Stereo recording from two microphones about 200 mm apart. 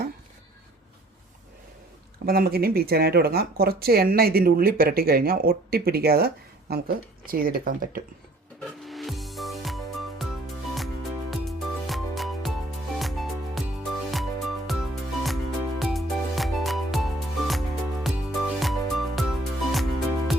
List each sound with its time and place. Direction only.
2.1 s speech: 50° right (ahead or behind)
8.8 s music: centre (ahead or behind)